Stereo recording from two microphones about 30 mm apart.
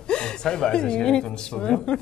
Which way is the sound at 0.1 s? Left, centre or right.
Left.